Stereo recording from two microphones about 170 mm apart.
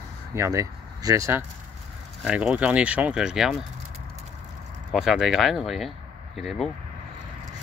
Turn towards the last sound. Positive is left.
turn(degrees=0)  # may be behind; listen again after turning